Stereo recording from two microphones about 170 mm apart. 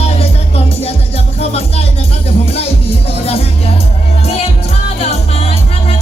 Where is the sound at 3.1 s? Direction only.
35° left (ahead or behind).